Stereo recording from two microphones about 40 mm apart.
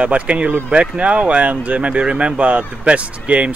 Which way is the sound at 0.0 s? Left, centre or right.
Right.